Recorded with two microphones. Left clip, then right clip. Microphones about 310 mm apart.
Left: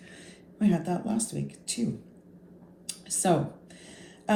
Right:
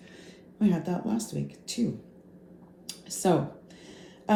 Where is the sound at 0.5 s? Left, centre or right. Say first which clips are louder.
Left 1 dB; left.